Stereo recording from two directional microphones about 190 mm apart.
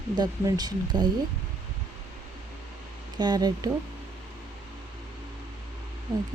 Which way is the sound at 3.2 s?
20° right (ahead or behind).